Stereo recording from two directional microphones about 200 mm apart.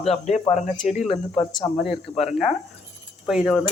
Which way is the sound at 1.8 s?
Centre (ahead or behind).